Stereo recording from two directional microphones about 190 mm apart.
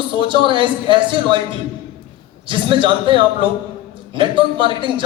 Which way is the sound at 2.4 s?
25° right (ahead or behind).